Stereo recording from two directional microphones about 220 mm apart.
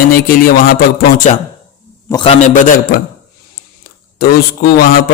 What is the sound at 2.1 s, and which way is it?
Speech, 25° left (ahead or behind).